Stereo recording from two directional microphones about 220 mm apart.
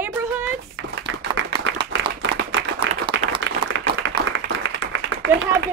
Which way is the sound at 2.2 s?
55° right (ahead or behind).